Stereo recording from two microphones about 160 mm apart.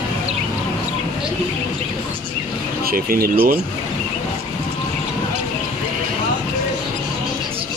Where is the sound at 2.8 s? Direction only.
65° right (ahead or behind).